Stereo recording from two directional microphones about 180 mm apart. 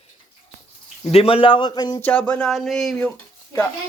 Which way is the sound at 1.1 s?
30° left (ahead or behind).